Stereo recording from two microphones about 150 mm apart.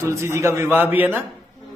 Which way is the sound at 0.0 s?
20° right (ahead or behind).